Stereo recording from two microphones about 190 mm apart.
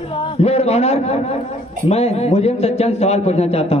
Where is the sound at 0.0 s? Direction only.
25° left (ahead or behind).